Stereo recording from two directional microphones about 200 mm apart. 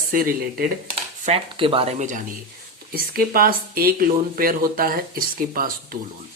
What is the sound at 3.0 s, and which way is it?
Speech, 50° right (ahead or behind).